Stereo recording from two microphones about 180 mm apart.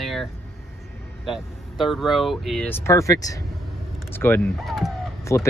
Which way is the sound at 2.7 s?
15° left (ahead or behind).